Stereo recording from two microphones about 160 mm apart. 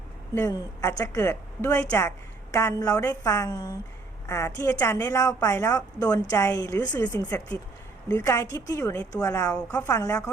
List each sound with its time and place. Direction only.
0.3 s a woman's voice: 20° left (ahead or behind)
8.0 s a woman's voice: 15° left (ahead or behind)